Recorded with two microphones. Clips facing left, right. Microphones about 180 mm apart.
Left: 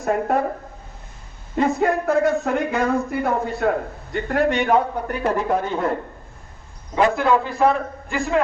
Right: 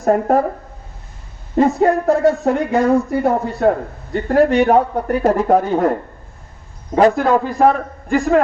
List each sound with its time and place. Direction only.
0.0 s speech: 40° right (ahead or behind)
1.5 s speech: 35° right (ahead or behind)
6.9 s a man's voice: 40° right (ahead or behind)